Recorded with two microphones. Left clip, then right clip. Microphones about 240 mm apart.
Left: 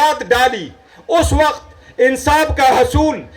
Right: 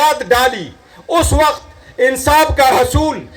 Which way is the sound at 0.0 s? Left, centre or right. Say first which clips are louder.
Right 1 dB; left.